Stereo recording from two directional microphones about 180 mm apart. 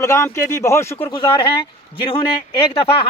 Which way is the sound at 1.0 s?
25° left (ahead or behind).